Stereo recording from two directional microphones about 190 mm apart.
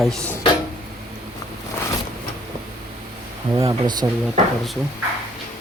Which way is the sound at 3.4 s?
20° right (ahead or behind).